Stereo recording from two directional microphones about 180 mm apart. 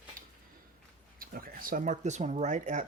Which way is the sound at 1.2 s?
55° right (ahead or behind).